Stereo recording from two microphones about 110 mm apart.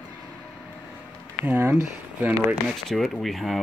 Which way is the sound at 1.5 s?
20° right (ahead or behind).